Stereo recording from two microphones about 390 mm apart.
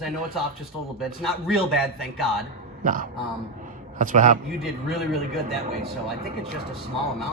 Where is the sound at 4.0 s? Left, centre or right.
Centre.